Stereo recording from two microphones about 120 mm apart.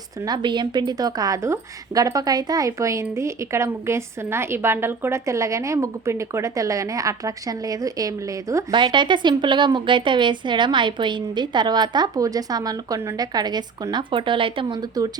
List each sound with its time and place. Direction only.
0.3 s a woman's voice: 40° right (ahead or behind)
8.7 s a woman's voice: 40° right (ahead or behind)